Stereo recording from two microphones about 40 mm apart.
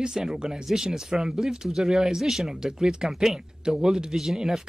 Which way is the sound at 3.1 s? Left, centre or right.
Centre.